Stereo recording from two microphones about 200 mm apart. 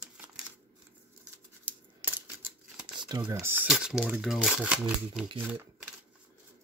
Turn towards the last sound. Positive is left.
turn(degrees=-10)  # may be behind; listen again after turning